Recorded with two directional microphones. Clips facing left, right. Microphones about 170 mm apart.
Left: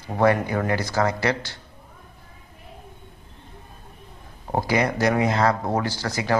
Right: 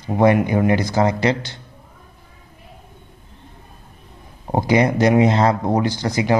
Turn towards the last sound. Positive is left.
turn(degrees=-20)  # may be behind; listen again after turning